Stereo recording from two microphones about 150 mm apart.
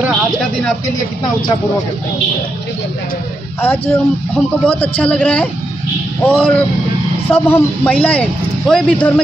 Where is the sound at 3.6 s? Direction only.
15° left (ahead or behind).